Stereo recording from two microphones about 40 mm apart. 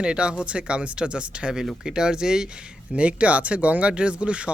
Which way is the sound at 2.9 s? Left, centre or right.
Right.